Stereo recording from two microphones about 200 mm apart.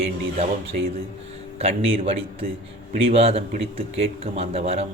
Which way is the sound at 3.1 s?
30° right (ahead or behind).